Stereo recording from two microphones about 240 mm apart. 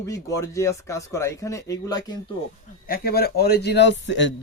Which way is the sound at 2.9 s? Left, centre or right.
Left.